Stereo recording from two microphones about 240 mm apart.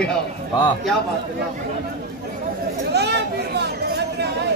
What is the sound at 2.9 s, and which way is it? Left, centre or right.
Chatter, right.